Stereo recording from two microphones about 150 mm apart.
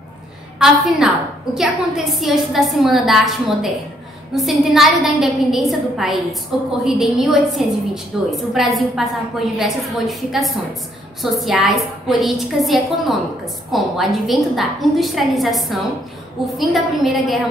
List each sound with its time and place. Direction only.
0.6 s a woman's voice: 5° right (ahead or behind)